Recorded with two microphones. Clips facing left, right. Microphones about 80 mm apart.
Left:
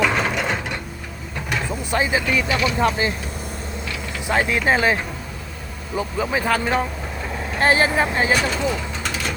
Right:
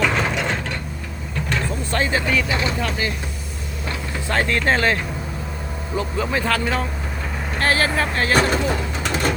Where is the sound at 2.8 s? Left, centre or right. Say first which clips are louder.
Left 5 dB; left.